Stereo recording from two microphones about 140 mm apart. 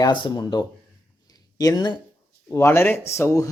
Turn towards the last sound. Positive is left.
turn(degrees=20)  # may be behind; listen again after turning